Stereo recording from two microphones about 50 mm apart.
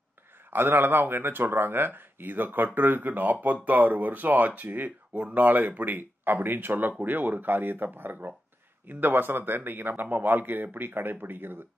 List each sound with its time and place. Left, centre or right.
0.5 s speech: right